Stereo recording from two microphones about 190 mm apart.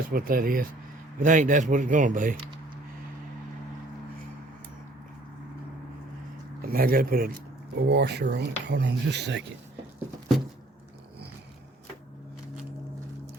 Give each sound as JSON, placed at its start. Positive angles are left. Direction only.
{"t": 0.1, "sound": "speech", "side_deg": -50}
{"t": 6.6, "sound": "speech", "side_deg": -50}